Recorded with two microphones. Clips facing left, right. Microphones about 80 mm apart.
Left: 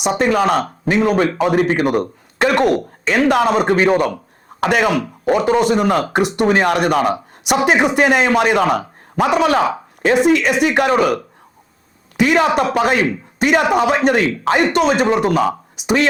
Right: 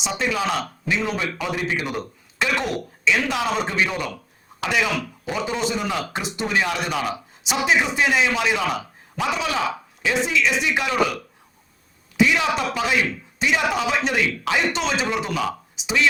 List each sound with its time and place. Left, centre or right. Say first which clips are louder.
0.0 s speech: left 9 dB; left